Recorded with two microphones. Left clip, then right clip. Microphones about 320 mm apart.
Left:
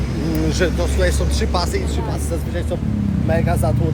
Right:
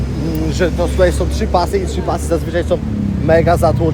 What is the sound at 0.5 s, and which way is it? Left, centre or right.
Speech, centre.